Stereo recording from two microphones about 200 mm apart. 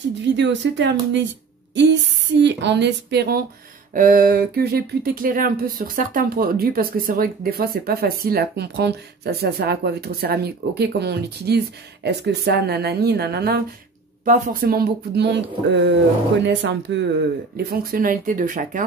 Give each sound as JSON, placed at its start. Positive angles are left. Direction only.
{"t": 0.2, "sound": "speech", "side_deg": -65}
{"t": 2.3, "sound": "speech", "side_deg": -60}
{"t": 3.9, "sound": "speech", "side_deg": -45}
{"t": 17.6, "sound": "speech", "side_deg": -50}